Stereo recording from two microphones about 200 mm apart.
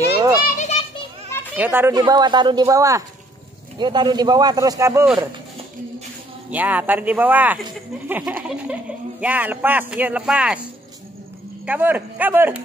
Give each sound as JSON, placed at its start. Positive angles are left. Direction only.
{"t": 0.5, "sound": "children playing", "side_deg": 40}
{"t": 1.6, "sound": "speech", "side_deg": -10}
{"t": 6.5, "sound": "speech", "side_deg": -10}
{"t": 11.6, "sound": "speech", "side_deg": -10}